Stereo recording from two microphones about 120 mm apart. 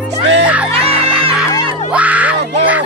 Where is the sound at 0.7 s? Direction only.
55° right (ahead or behind).